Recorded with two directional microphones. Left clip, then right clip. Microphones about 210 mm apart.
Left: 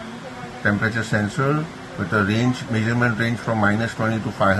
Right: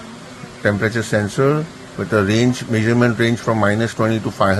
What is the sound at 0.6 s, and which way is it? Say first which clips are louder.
Speech: right 3 dB; 50° right (ahead or behind).